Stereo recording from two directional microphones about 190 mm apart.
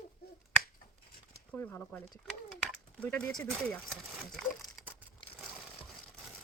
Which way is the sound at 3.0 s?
10° left (ahead or behind).